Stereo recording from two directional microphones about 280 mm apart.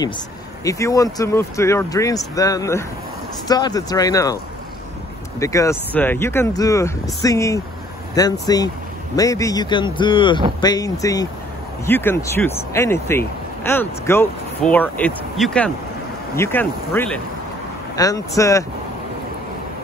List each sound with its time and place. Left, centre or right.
0.7 s speech: centre
5.4 s speech: centre